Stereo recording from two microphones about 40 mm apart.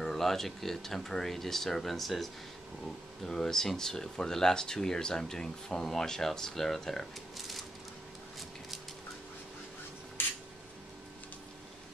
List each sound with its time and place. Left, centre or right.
0.0 s speech: centre
3.3 s speech: centre
7.3 s coin: centre